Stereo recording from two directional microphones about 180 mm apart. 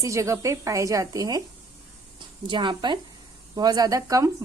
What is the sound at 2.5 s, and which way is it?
A woman's voice, 25° right (ahead or behind).